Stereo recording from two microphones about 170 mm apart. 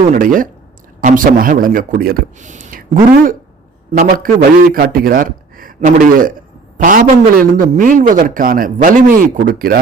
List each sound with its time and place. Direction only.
0.1 s a man's voice: 50° right (ahead or behind)